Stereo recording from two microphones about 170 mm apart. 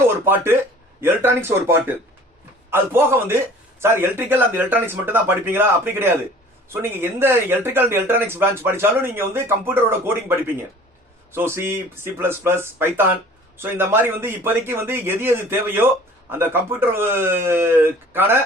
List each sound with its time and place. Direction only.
0.3 s speech: 15° right (ahead or behind)